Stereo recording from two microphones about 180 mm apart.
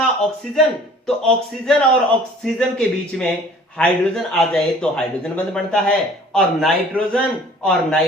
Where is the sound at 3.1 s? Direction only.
Centre (ahead or behind).